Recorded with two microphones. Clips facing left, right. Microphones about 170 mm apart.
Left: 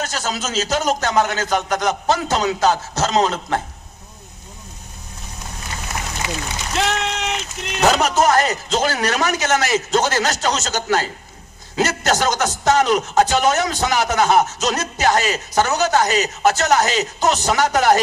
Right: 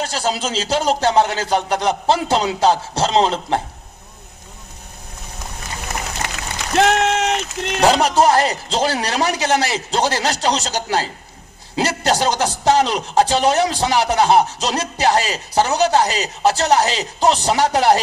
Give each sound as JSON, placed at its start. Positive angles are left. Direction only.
{"t": 0.0, "sound": "a man's voice", "side_deg": -30}
{"t": 6.7, "sound": "speech", "side_deg": -55}
{"t": 7.8, "sound": "a man's voice", "side_deg": -30}